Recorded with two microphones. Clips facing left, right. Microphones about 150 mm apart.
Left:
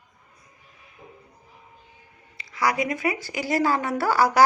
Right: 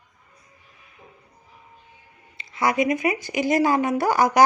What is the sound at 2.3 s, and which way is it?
Speech, 25° right (ahead or behind).